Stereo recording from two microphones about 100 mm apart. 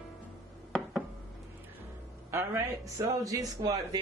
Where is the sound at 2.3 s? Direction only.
25° right (ahead or behind).